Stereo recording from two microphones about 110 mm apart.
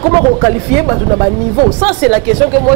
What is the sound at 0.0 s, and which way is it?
Speech, 45° right (ahead or behind).